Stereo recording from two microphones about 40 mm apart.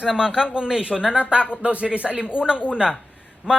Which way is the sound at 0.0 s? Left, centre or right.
Centre.